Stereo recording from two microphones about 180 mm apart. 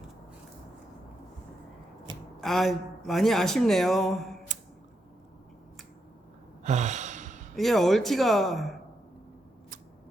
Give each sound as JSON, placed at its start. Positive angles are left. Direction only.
{"t": 2.4, "sound": "speech", "side_deg": 0}
{"t": 6.7, "sound": "sigh", "side_deg": -40}
{"t": 7.5, "sound": "speech", "side_deg": 0}